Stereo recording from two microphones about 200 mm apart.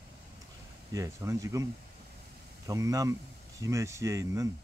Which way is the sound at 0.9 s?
15° right (ahead or behind).